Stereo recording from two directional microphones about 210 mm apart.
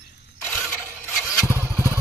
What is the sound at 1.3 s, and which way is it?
Motorcycle, 15° left (ahead or behind).